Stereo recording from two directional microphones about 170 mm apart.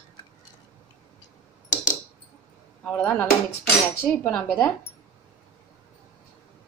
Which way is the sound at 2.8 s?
5° left (ahead or behind).